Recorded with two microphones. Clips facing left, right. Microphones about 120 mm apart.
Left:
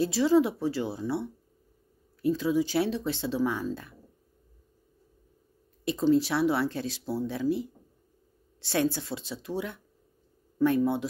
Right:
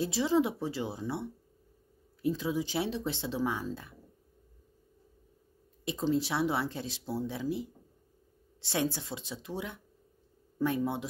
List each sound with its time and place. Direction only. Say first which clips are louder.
0.0 s speech: left 5 dB; 20° right (ahead or behind)
2.2 s speech: left 5 dB; 20° right (ahead or behind)
5.9 s speech: left 6 dB; 20° right (ahead or behind)